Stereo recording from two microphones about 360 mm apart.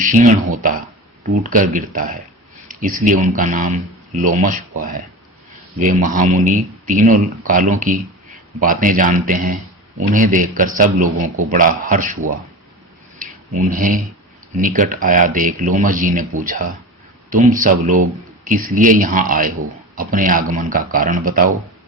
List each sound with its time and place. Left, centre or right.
0.0 s speech: right
13.1 s a sound: right
14.6 s speech: right